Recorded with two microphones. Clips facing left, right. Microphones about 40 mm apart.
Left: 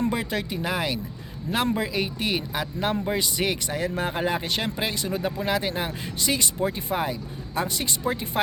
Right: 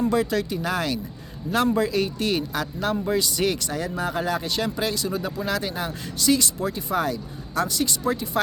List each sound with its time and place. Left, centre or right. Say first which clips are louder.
0.1 s speech: right 5 dB; left